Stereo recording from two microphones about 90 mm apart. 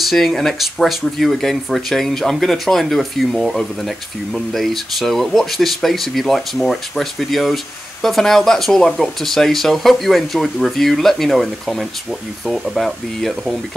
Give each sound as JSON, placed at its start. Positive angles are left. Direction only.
{"t": 0.1, "sound": "speech", "side_deg": 0}